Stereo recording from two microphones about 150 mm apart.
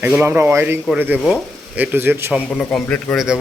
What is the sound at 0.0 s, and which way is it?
Speech, 10° right (ahead or behind).